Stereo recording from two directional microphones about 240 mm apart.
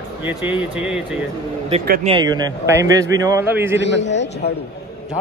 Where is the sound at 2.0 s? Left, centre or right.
Centre.